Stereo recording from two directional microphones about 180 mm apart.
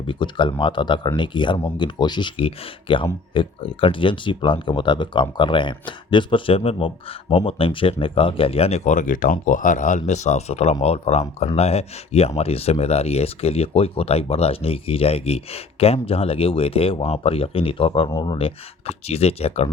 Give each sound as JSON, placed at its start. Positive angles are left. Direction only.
{"t": 0.1, "sound": "speech", "side_deg": 25}